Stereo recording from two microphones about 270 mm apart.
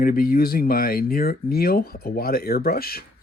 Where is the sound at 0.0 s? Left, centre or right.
Left.